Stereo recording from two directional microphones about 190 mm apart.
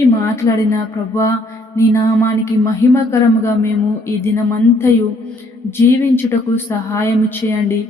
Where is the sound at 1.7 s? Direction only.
15° left (ahead or behind).